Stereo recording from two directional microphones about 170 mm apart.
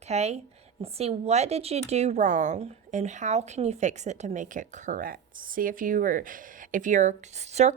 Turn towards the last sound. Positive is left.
turn(degrees=-40)  # may be behind; listen again after turning